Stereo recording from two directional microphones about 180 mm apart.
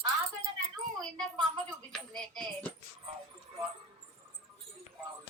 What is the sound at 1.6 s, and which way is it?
Speech, 5° left (ahead or behind).